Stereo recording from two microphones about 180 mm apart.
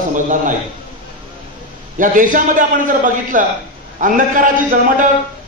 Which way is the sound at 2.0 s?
50° right (ahead or behind).